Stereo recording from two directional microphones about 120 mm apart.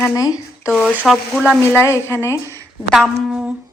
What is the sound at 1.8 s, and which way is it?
Speech, 20° left (ahead or behind).